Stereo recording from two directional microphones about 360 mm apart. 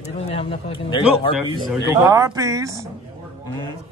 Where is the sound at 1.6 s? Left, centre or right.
Centre.